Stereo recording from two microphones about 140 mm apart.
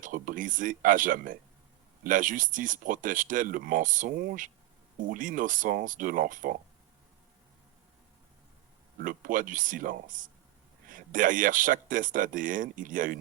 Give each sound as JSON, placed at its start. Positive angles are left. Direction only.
{"t": 0.0, "sound": "speech", "side_deg": -75}
{"t": 9.0, "sound": "speech", "side_deg": -75}